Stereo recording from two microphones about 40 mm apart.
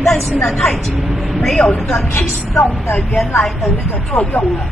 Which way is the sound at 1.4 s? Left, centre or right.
Centre.